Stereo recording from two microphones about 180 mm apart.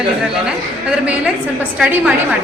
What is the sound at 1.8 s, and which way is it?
Speech, 5° right (ahead or behind).